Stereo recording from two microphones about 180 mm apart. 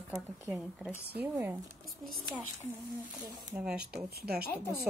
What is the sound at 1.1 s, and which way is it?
Speech, 10° right (ahead or behind).